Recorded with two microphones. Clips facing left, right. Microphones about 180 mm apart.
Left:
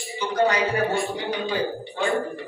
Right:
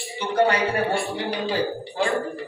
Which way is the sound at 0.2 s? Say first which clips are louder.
Right 1 dB; 30° right (ahead or behind).